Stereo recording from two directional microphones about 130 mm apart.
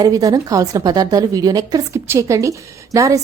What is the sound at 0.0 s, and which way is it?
A woman's voice, 30° right (ahead or behind).